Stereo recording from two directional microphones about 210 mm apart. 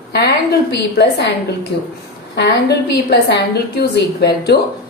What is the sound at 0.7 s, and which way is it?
A woman's voice, 55° left (ahead or behind).